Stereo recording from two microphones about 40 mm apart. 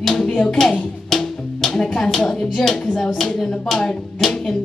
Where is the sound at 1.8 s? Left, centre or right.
Left.